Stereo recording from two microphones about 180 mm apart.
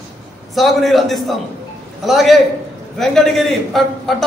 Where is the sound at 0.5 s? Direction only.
Centre (ahead or behind).